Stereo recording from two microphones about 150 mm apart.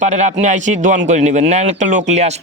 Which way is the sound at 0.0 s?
50° right (ahead or behind).